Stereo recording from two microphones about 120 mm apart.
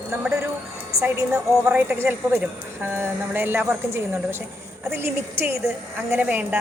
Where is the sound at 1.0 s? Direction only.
25° right (ahead or behind).